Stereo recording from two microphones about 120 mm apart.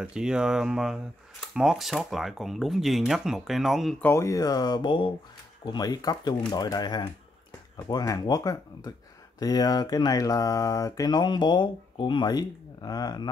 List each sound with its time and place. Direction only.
0.0 s speech: 5° right (ahead or behind)
4.0 s speech: 25° left (ahead or behind); by 5.1 s 45° left (ahead or behind)
5.7 s speech: 35° left (ahead or behind)